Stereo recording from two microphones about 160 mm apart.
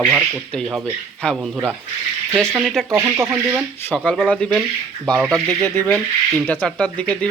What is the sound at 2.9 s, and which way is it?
Speech, 15° right (ahead or behind).